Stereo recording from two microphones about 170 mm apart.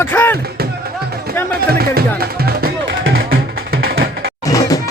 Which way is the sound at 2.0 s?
65° right (ahead or behind).